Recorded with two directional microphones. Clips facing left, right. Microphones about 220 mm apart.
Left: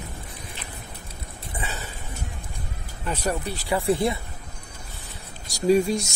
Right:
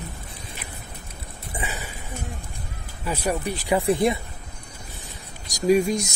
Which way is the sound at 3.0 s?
10° right (ahead or behind).